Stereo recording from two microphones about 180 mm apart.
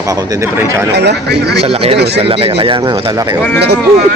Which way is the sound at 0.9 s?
65° right (ahead or behind).